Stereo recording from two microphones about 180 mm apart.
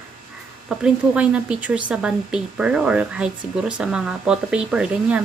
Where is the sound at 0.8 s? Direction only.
5° right (ahead or behind).